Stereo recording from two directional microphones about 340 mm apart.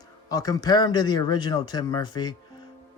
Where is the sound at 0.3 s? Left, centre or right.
Centre.